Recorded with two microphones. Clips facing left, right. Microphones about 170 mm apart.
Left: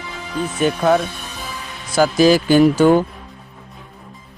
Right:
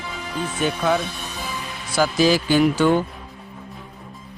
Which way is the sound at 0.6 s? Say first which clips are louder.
Left 5 dB; 50° left (ahead or behind).